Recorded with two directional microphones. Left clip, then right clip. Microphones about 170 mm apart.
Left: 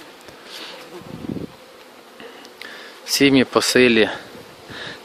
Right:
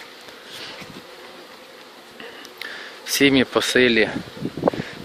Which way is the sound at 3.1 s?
15° left (ahead or behind).